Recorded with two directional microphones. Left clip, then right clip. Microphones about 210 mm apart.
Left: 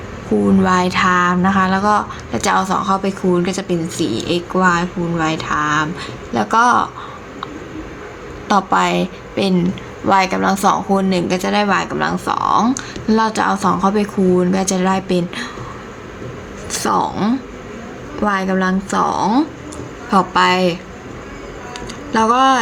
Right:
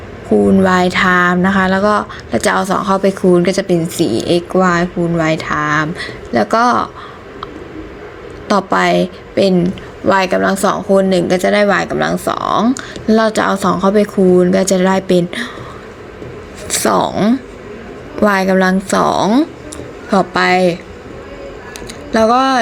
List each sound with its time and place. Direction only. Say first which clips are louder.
0.6 s speech: right 3 dB; 20° right (ahead or behind)
8.4 s a woman's voice: right 2 dB; 15° right (ahead or behind)
16.6 s a woman's voice: right 4 dB; 20° right (ahead or behind)
22.1 s a woman's voice: right 1 dB; 15° right (ahead or behind)